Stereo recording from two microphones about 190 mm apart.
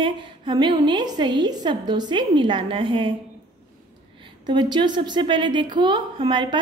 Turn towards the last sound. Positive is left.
turn(degrees=-25)  # may be behind; listen again after turning